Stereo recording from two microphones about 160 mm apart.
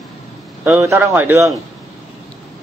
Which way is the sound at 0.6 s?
15° right (ahead or behind).